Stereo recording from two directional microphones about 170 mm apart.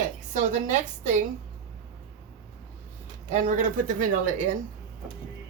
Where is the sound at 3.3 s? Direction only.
50° right (ahead or behind).